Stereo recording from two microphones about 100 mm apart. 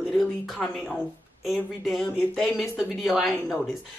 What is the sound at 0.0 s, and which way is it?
A man's voice, centre (ahead or behind).